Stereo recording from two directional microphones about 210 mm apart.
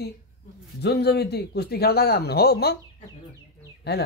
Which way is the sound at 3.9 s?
50° left (ahead or behind).